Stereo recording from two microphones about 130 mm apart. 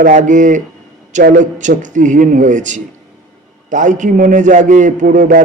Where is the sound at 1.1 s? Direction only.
85° right.